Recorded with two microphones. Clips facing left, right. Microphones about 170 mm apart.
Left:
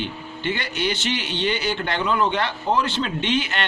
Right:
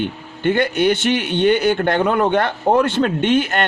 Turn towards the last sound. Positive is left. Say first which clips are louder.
# right 7 dB
turn(degrees=-50)  # may be behind; listen again after turning